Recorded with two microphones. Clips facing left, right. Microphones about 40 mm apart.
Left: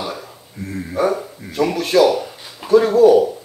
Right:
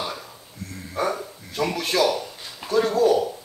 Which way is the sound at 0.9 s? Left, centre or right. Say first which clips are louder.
Left 6 dB; centre.